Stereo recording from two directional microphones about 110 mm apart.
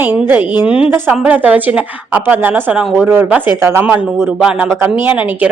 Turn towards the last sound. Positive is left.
turn(degrees=-15)  # may be behind; listen again after turning